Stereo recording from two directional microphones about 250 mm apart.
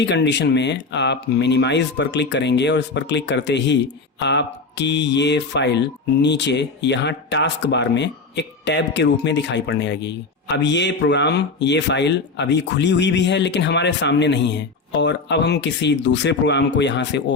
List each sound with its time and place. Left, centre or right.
0.0 s speech: left